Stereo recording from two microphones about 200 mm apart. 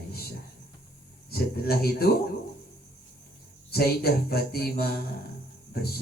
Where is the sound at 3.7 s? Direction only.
50° left (ahead or behind).